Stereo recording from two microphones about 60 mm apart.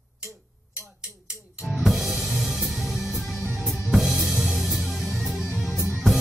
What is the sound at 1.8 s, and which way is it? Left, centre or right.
Music, centre.